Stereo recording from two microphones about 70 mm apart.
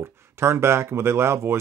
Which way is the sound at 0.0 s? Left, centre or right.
Right.